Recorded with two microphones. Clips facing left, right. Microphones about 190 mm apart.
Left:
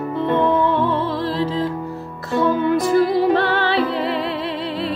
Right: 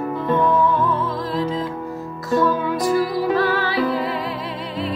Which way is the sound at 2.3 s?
25° left (ahead or behind).